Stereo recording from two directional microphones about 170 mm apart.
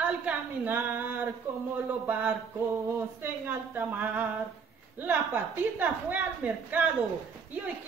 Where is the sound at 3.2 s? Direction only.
10° right (ahead or behind).